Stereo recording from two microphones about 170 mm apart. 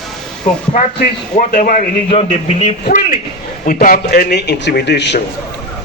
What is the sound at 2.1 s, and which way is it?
Speech, 40° left (ahead or behind).